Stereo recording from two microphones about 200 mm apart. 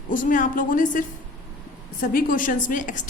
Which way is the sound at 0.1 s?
40° left (ahead or behind).